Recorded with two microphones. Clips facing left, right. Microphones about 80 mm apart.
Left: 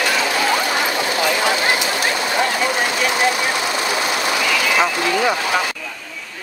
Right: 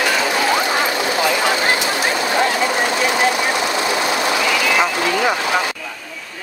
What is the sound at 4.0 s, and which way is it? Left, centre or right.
Train, centre.